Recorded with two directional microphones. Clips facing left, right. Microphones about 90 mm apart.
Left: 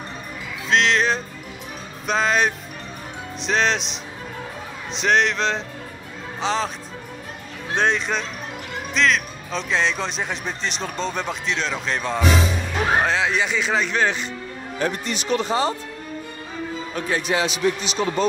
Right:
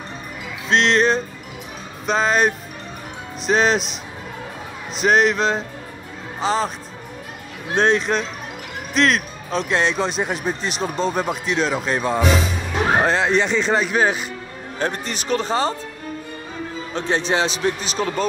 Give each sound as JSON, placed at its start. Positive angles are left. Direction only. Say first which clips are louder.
{"t": 0.7, "sound": "speech", "louder": "right 2 dB", "side_deg": 0}
{"t": 7.7, "sound": "speech", "louder": "right 4 dB", "side_deg": 0}
{"t": 14.8, "sound": "a man's voice", "louder": "even", "side_deg": -40}
{"t": 16.9, "sound": "a man's voice", "louder": "right 3 dB", "side_deg": -25}